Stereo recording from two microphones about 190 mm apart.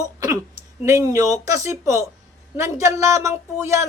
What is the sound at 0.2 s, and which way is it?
Speech, 15° right (ahead or behind).